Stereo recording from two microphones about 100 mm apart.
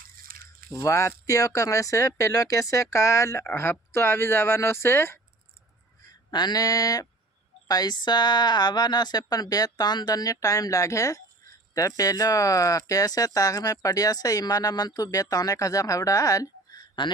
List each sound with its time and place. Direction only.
0.7 s speech: 30° left (ahead or behind)
6.3 s speech: 40° left (ahead or behind)